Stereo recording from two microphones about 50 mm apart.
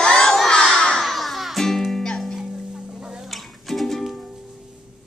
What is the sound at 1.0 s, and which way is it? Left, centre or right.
Music, centre.